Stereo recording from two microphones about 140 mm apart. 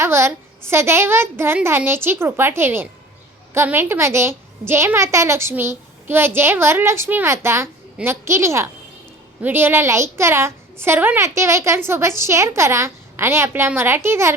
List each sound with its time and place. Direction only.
0.0 s a child's voice: 20° right (ahead or behind)